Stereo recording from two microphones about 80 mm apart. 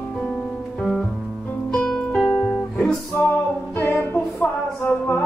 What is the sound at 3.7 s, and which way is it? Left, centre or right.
Music, left.